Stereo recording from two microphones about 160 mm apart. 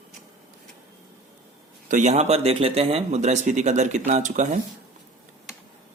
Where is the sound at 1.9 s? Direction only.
45° right (ahead or behind).